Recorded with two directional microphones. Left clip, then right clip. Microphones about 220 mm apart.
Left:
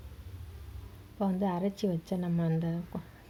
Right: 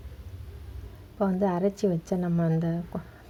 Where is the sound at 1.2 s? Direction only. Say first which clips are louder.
Right 6 dB; centre (ahead or behind).